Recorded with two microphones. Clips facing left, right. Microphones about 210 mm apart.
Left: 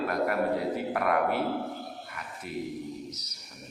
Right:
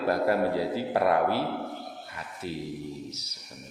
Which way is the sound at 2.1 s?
30° right (ahead or behind).